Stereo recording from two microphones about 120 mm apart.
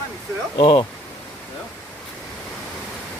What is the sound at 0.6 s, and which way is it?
Speech, 40° left (ahead or behind).